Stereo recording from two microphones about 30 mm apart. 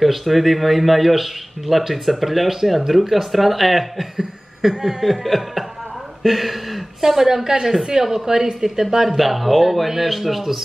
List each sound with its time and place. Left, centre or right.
0.0 s speech: centre
4.2 s chuckle: centre
5.2 s speech: centre
7.0 s a woman's voice: centre
9.1 s speech: centre